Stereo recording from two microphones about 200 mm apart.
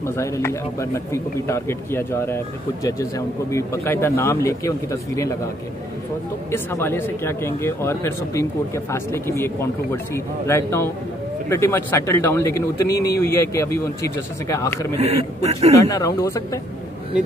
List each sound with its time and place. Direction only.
0.0 s speech: 15° left (ahead or behind)
6.5 s speech: 10° left (ahead or behind)
15.0 s a man's voice: 30° right (ahead or behind)
15.8 s speech: 15° left (ahead or behind)